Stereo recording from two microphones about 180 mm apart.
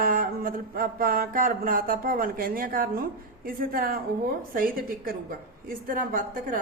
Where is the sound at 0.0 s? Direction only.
50° right (ahead or behind).